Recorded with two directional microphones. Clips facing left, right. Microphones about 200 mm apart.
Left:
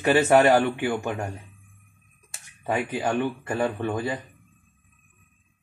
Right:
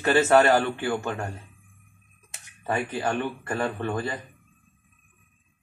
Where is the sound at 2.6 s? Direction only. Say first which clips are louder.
Left 1 dB; 15° left (ahead or behind).